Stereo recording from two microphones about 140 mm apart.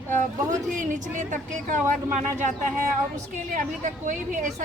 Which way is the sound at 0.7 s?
65° right (ahead or behind).